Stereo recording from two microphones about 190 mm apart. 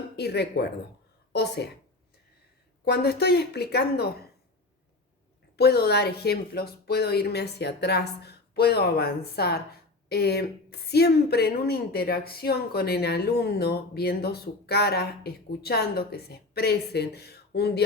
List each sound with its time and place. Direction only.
0.2 s a woman's voice: 60° left (ahead or behind)
2.8 s a woman's voice: 55° left (ahead or behind)
5.5 s a woman's voice: 60° left (ahead or behind)